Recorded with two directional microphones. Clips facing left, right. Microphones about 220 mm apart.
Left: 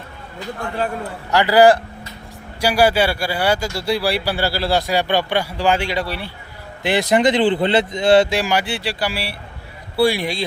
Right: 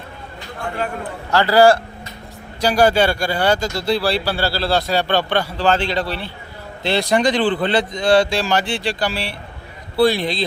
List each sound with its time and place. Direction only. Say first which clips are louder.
1.3 s a man's voice: even; 15° left (ahead or behind)